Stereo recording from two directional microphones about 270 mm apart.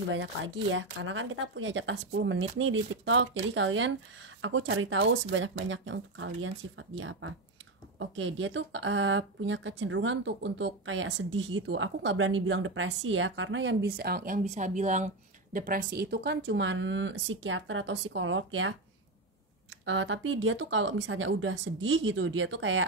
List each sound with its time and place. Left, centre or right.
0.1 s speech: right